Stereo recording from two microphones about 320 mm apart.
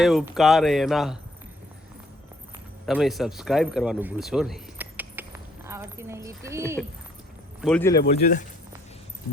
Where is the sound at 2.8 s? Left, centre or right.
Centre.